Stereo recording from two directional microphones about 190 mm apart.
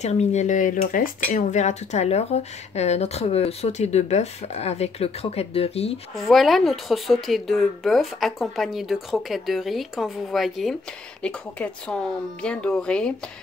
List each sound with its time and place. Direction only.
0.0 s speech: 35° left (ahead or behind)
6.1 s speech: centre (ahead or behind)